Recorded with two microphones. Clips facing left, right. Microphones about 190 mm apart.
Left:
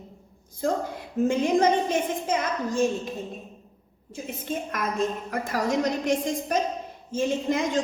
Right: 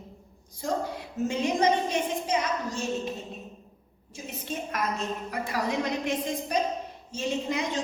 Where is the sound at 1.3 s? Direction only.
50° left (ahead or behind).